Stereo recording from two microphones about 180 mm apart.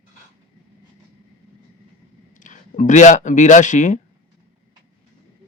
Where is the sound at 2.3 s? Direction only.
45° left (ahead or behind).